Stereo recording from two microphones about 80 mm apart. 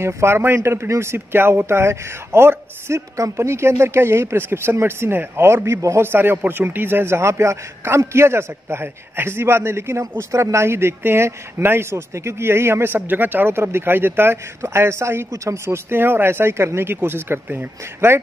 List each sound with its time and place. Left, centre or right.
0.0 s speech: right